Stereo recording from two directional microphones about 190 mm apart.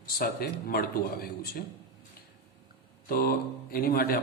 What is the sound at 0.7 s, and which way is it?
Speech, 50° left (ahead or behind).